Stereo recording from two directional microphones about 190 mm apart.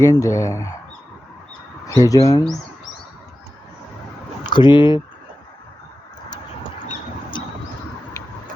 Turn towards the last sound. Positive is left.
turn(degrees=25)  # may be behind; listen again after turning